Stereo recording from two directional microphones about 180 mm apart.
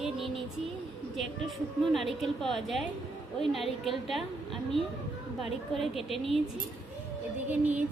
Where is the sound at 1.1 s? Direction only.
Centre (ahead or behind).